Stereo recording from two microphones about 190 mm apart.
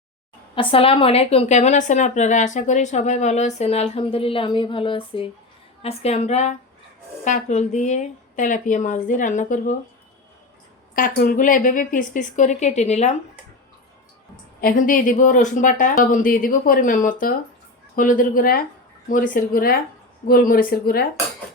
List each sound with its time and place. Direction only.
0.5 s a woman's voice: 30° left (ahead or behind)
10.9 s a woman's voice: 45° left (ahead or behind)
14.6 s a woman's voice: 45° left (ahead or behind)